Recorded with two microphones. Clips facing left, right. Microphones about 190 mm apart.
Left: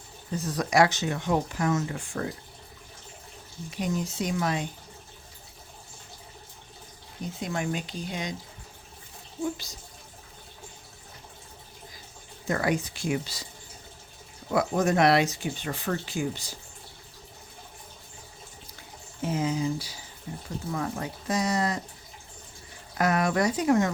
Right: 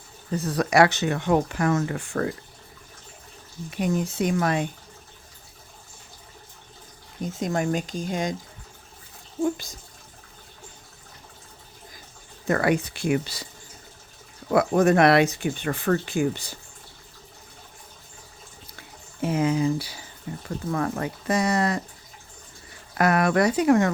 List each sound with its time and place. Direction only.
0.3 s speech: 60° right (ahead or behind)
3.7 s speech: 55° right (ahead or behind)
7.3 s speech: 45° right (ahead or behind)
9.4 s speech: 50° right (ahead or behind)
12.5 s speech: 60° right (ahead or behind)
14.5 s speech: 65° right (ahead or behind)
19.2 s speech: 65° right (ahead or behind)
23.0 s speech: 65° right (ahead or behind)